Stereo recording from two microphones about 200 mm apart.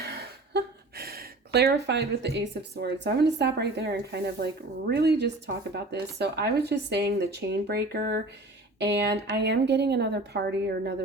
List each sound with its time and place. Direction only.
0.0 s speech: 50° right (ahead or behind)